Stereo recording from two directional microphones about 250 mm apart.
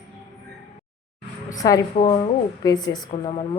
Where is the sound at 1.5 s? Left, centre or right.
Centre.